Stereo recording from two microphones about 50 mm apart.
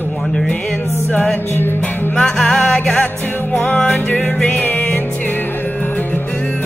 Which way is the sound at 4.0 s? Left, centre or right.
Left.